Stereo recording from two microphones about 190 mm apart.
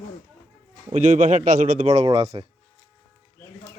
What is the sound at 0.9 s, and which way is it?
A man's voice, 40° right (ahead or behind).